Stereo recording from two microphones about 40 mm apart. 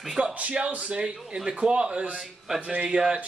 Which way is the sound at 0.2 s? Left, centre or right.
Right.